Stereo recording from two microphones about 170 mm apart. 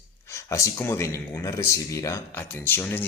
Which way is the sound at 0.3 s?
15° left (ahead or behind).